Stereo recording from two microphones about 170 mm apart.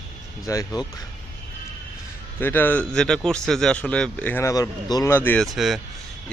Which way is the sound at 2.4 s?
10° left (ahead or behind).